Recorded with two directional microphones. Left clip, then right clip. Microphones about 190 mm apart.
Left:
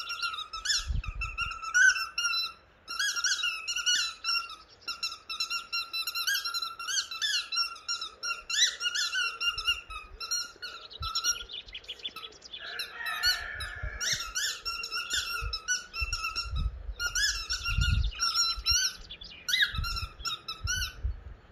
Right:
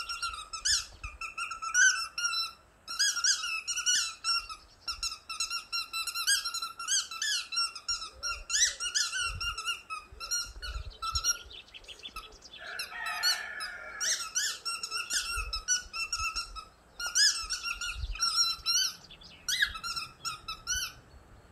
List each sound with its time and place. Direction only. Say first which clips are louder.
0.1 s squeak: left 3 dB; 20° right (ahead or behind)
10.6 s a sound: even; 20° right (ahead or behind)
12.7 s squeak: left 1 dB; 20° right (ahead or behind)